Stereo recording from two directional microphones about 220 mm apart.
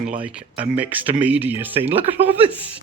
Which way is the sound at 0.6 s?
5° right (ahead or behind).